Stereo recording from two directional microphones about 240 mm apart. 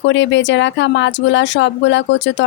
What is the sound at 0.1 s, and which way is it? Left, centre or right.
A woman's voice, left.